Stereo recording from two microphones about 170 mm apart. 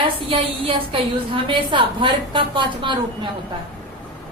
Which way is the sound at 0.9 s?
35° right (ahead or behind).